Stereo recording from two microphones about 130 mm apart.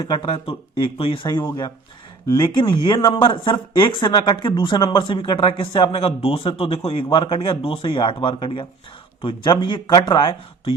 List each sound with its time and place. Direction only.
0.2 s speech: 45° left (ahead or behind)
1.4 s speech: 25° left (ahead or behind)
2.5 s speech: 35° left (ahead or behind)